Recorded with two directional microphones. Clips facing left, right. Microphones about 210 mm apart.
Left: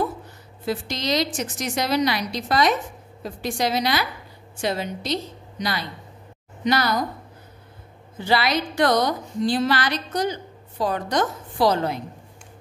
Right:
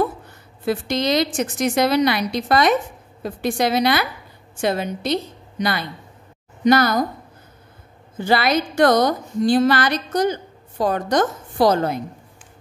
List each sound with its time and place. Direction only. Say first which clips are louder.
0.7 s a woman's voice: right 5 dB; 55° right (ahead or behind)
8.2 s a woman's voice: right 3 dB; 50° right (ahead or behind)